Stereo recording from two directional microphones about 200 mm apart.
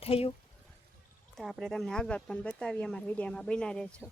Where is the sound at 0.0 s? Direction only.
30° left (ahead or behind).